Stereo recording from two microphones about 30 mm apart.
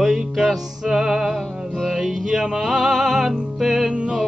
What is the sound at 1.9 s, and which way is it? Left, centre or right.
Music, centre.